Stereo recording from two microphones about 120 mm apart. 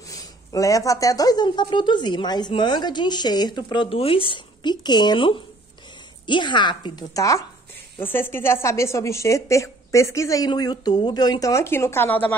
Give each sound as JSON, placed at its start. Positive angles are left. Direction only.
{"t": 0.1, "sound": "a woman's voice", "side_deg": 30}